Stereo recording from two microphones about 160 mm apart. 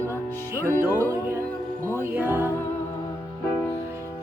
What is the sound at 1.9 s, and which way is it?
Music, 15° right (ahead or behind).